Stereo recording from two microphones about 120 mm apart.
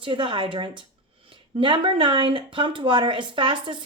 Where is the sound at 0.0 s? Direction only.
45° right (ahead or behind).